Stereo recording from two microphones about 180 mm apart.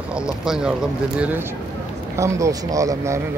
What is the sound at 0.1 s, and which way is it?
Speech, 5° right (ahead or behind).